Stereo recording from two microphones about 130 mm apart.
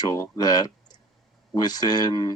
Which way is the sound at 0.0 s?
30° left (ahead or behind).